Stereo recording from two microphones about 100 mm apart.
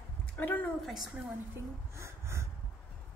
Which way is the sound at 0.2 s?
15° left (ahead or behind).